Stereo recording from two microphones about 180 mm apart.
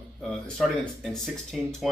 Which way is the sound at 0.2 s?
Centre (ahead or behind).